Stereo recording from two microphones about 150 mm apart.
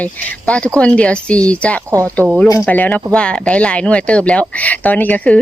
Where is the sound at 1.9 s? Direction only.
20° right (ahead or behind).